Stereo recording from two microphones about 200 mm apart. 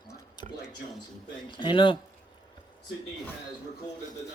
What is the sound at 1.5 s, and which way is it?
Speech, 25° left (ahead or behind).